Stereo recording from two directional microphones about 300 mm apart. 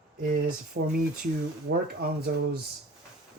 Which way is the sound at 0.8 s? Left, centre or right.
Right.